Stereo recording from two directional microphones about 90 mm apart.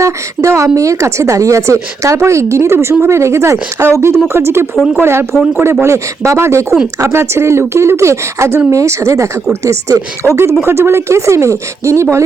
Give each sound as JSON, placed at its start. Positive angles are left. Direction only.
{"t": 0.0, "sound": "a woman's voice", "side_deg": -35}